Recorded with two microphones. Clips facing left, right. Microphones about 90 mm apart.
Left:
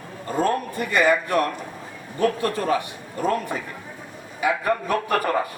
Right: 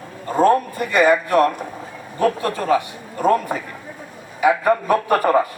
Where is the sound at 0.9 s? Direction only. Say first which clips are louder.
Right 5 dB; 35° right (ahead or behind).